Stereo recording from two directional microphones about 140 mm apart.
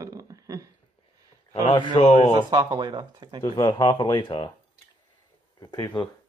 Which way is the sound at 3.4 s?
30° left (ahead or behind).